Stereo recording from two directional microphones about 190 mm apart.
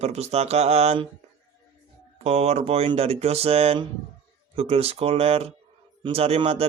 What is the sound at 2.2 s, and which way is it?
Speech, 35° right (ahead or behind).